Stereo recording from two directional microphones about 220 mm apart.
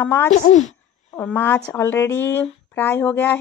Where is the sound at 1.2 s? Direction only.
10° left (ahead or behind).